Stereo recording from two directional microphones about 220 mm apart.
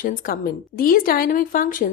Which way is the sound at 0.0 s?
40° left (ahead or behind).